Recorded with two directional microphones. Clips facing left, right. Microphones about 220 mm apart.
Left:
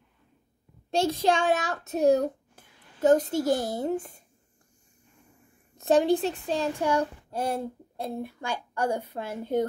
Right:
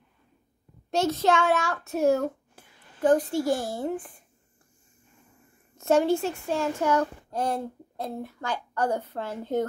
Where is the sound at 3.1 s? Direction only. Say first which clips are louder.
Even; 40° left (ahead or behind).